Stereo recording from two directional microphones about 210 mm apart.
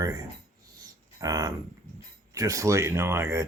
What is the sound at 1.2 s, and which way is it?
Speech, 15° right (ahead or behind).